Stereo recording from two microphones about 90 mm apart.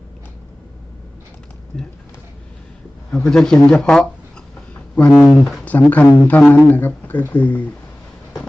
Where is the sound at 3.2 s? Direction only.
5° left (ahead or behind).